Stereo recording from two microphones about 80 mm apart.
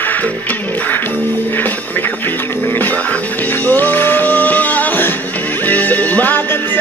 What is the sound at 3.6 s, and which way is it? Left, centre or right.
Music, left.